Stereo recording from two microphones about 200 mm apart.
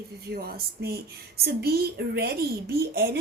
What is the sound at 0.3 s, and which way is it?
A woman's voice, 50° right (ahead or behind).